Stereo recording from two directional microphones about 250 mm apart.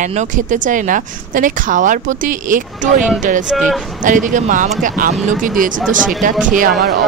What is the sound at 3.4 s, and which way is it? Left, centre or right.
Speech, centre.